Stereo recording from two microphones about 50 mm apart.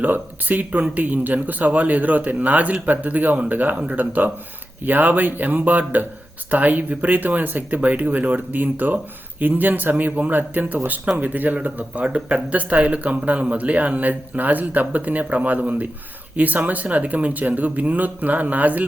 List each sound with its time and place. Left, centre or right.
0.0 s speech: right